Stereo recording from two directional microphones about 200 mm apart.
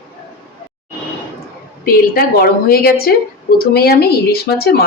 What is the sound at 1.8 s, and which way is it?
Speech, 50° left (ahead or behind).